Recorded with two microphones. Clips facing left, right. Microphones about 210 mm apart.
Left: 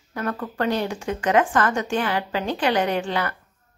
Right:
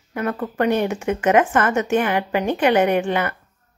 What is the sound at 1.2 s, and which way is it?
Speech, 10° right (ahead or behind).